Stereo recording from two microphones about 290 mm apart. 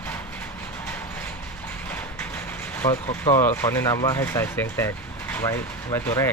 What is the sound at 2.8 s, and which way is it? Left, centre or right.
Speech, centre.